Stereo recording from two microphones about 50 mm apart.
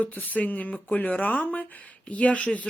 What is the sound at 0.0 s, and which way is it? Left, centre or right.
Speech, left.